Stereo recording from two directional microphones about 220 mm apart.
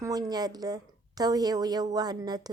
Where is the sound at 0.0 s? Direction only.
15° right (ahead or behind).